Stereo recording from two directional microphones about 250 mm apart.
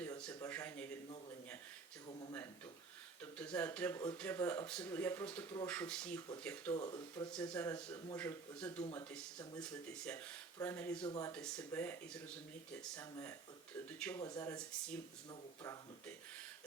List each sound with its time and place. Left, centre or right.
0.0 s a sound: centre
3.3 s speech: centre
8.8 s speech: centre
9.6 s speech: centre
11.3 s speech: centre